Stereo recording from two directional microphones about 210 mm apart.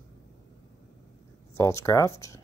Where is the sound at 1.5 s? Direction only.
15° left (ahead or behind).